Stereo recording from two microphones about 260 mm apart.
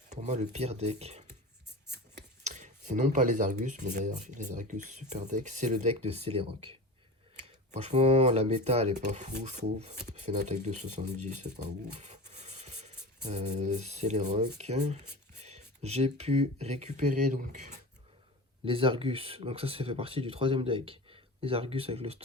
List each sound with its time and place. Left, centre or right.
0.1 s speech: right
2.4 s speech: right
18.6 s speech: centre